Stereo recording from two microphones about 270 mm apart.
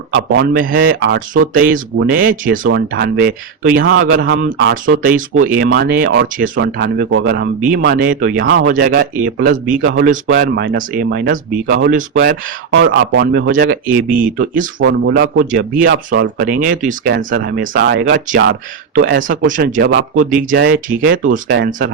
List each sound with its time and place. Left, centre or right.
0.2 s speech: right
12.3 s speech: right
14.8 s speech: right
15.4 s speech: right
21.4 s speech: right
21.7 s speech: right